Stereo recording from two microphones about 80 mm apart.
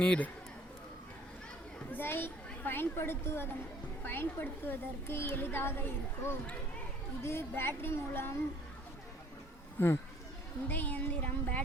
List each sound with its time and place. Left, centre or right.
0.0 s speech: centre
1.9 s a woman's voice: left
10.7 s a child's voice: left